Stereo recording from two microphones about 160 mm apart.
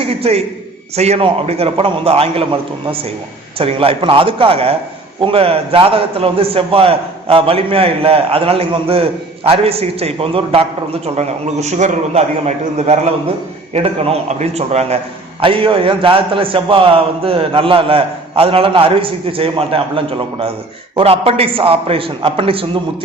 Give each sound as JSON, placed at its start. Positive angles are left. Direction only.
{"t": 0.0, "sound": "a man's voice", "side_deg": -40}
{"t": 20.9, "sound": "a man's voice", "side_deg": -40}